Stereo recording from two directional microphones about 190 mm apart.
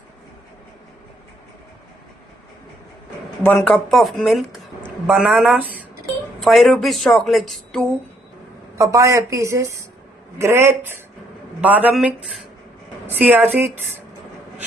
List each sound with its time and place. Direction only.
3.4 s a woman's voice: 10° left (ahead or behind)
8.8 s a woman's voice: 15° right (ahead or behind)